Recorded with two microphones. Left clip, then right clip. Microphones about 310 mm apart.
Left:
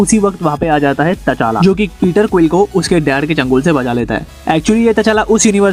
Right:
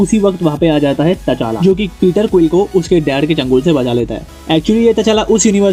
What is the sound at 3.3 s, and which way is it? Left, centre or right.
Speech, left.